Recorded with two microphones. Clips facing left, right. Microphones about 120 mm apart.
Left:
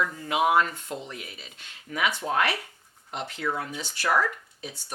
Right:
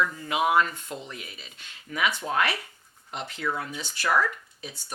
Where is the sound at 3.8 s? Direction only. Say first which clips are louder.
Even; 65° left (ahead or behind).